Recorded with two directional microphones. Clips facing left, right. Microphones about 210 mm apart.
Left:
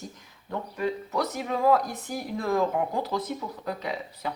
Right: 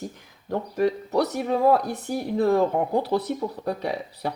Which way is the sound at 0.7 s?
35° right (ahead or behind).